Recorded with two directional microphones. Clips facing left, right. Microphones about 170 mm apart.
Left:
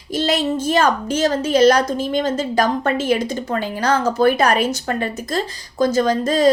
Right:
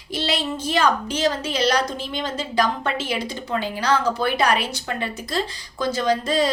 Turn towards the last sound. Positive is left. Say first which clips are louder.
# left 5 dB
turn(degrees=45)  # may be behind; listen again after turning